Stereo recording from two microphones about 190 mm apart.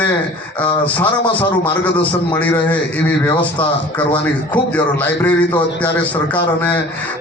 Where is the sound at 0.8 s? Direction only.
10° left (ahead or behind).